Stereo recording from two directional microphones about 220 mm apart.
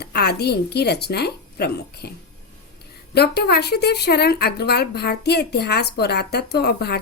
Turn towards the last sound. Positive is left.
turn(degrees=45)  # may be behind; listen again after turning